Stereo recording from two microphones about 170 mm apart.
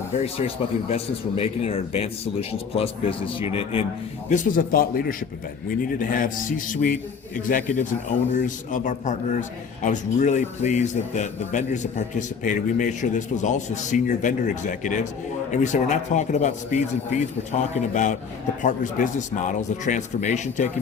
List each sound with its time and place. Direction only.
0.1 s speech: 40° left (ahead or behind)
4.3 s a man's voice: 50° left (ahead or behind)